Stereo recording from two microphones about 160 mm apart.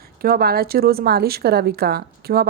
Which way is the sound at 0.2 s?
70° right (ahead or behind).